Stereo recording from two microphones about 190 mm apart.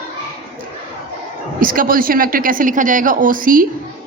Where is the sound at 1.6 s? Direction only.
50° right (ahead or behind).